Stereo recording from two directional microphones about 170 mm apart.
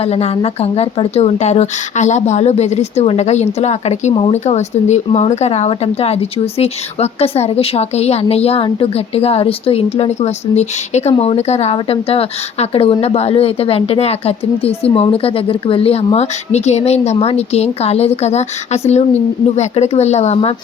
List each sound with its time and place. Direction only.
0.0 s speech: 35° left (ahead or behind)